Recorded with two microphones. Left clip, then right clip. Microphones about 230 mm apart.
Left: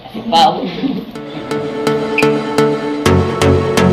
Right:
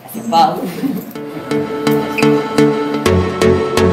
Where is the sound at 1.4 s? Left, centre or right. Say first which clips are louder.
Even; centre.